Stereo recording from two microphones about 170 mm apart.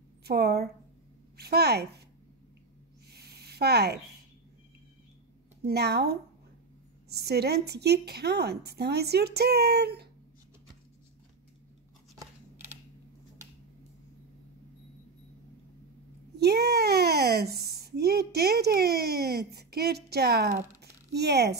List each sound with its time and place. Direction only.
0.2 s a woman's voice: 70° right (ahead or behind)
3.1 s a sound: 70° right (ahead or behind)
5.7 s speech: 75° right (ahead or behind)
12.2 s scissors: 15° right (ahead or behind)
16.3 s speech: 70° right (ahead or behind)
20.8 s a sound: 75° right (ahead or behind)